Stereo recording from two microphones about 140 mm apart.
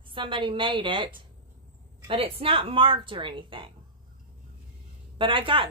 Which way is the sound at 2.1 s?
40° right (ahead or behind).